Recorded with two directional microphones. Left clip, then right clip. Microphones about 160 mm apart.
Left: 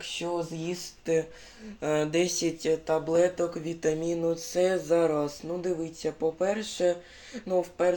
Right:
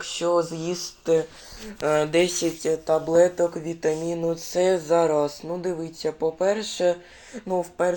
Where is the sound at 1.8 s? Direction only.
25° left (ahead or behind).